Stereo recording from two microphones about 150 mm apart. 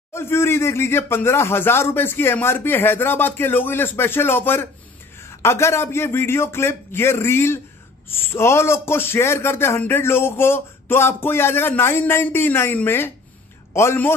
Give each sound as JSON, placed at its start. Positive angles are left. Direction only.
{"t": 0.1, "sound": "speech", "side_deg": 15}